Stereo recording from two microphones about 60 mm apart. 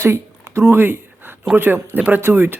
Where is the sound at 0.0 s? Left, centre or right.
Right.